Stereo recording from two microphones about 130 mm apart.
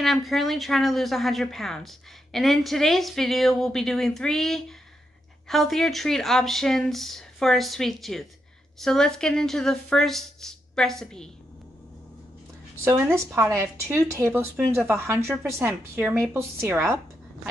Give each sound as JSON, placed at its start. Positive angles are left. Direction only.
{"t": 0.0, "sound": "a woman's voice", "side_deg": 0}
{"t": 12.8, "sound": "a woman's voice", "side_deg": -20}